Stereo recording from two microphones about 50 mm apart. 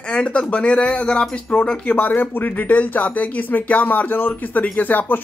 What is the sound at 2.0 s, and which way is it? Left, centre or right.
Speech, left.